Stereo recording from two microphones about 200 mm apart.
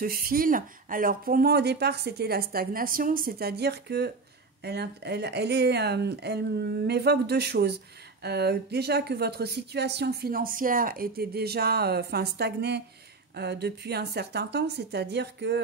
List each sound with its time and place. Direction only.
0.0 s speech: 45° right (ahead or behind)